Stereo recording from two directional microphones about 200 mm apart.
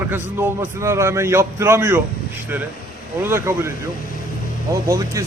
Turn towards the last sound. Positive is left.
turn(degrees=-15)  # may be behind; listen again after turning